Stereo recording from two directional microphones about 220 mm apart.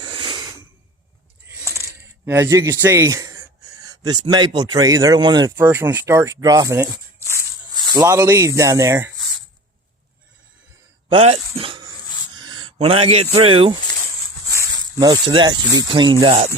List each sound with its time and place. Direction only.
0.0 s snort: 20° right (ahead or behind)
1.6 s coin: 15° left (ahead or behind)
1.9 s a man's voice: 10° right (ahead or behind)
11.1 s speech: 25° right (ahead or behind)
12.3 s a sound: 20° right (ahead or behind)
13.3 s speech: 25° right (ahead or behind)
14.8 s speech: 15° right (ahead or behind)